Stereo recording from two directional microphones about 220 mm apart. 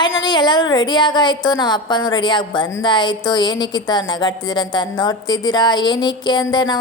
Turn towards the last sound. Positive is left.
turn(degrees=20)  # may be behind; listen again after turning